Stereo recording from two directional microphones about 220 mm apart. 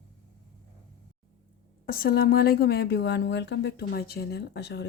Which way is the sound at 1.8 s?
40° left (ahead or behind).